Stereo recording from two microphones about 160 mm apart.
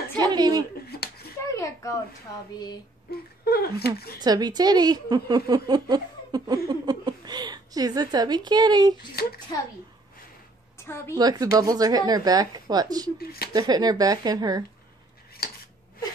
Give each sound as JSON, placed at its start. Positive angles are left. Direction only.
{"t": 0.2, "sound": "a woman's voice", "side_deg": -25}
{"t": 0.8, "sound": "a sound", "side_deg": 85}
{"t": 1.5, "sound": "speech", "side_deg": 20}
{"t": 3.1, "sound": "speech", "side_deg": 75}
{"t": 4.2, "sound": "a woman's voice", "side_deg": -25}
{"t": 9.2, "sound": "speech", "side_deg": 75}
{"t": 10.8, "sound": "a woman's voice", "side_deg": 15}
{"t": 11.1, "sound": "a woman's voice", "side_deg": -25}
{"t": 13.2, "sound": "speech", "side_deg": 70}
{"t": 13.5, "sound": "a woman's voice", "side_deg": -25}
{"t": 15.4, "sound": "a sound", "side_deg": 75}